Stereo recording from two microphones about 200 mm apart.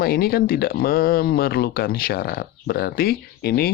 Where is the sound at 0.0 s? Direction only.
50° left (ahead or behind).